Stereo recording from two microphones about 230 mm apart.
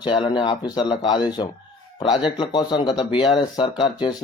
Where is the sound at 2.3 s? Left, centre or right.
Centre.